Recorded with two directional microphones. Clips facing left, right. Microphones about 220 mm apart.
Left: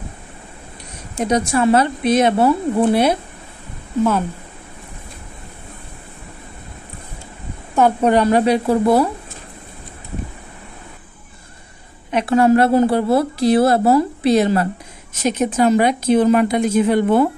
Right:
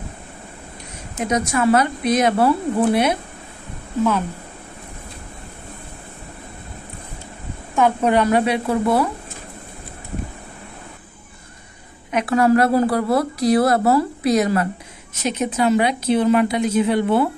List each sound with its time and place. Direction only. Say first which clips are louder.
1.1 s a woman's voice: left 3 dB; 30° left (ahead or behind)
7.7 s a woman's voice: left 2 dB; 40° left (ahead or behind)
12.1 s a woman's voice: left 2 dB; 30° left (ahead or behind)
15.2 s a woman's voice: left 3 dB; 45° left (ahead or behind)